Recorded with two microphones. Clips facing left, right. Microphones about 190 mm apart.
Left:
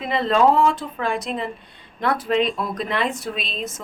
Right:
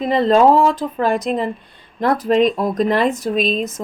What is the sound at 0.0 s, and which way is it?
A woman's voice, 40° right (ahead or behind).